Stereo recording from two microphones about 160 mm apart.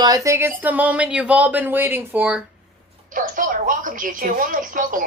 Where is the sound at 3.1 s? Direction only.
55° right (ahead or behind).